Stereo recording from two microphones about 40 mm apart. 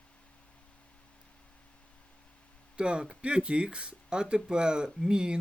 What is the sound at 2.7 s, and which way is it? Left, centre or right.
Speech, right.